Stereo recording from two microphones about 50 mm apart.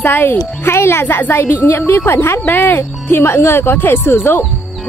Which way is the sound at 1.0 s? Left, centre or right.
Left.